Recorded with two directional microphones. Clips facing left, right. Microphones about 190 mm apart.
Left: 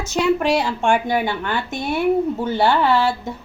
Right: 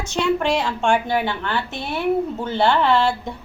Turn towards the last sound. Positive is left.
turn(degrees=5)  # may be behind; listen again after turning